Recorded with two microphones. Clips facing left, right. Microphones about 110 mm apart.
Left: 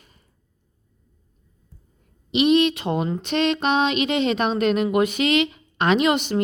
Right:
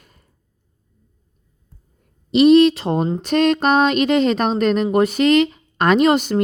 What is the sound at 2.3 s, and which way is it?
Speech, 40° right (ahead or behind).